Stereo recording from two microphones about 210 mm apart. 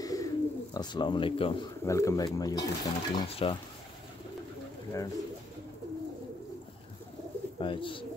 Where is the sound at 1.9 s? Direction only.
15° left (ahead or behind).